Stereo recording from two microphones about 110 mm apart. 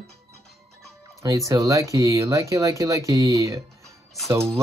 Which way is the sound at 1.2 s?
30° right (ahead or behind).